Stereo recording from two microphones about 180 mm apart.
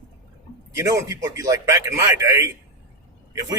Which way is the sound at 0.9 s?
20° right (ahead or behind).